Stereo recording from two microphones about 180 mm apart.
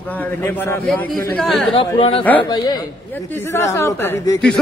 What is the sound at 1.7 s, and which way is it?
Speech, 25° left (ahead or behind).